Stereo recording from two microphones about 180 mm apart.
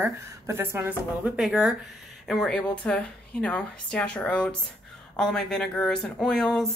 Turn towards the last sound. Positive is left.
turn(degrees=0)  # may be behind; listen again after turning